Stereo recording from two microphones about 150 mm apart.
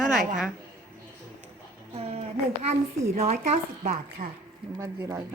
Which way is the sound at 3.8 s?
60° right (ahead or behind).